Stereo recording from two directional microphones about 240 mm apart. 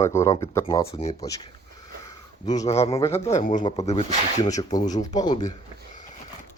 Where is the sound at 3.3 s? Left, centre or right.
Left.